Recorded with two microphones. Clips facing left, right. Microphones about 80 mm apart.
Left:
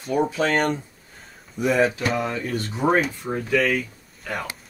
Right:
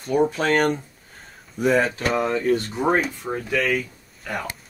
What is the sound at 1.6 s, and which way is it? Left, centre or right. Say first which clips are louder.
Speech: even; right.